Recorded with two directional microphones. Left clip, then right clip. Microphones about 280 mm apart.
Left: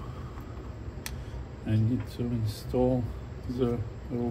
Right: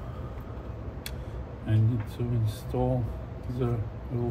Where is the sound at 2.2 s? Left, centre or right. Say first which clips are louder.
Even; left.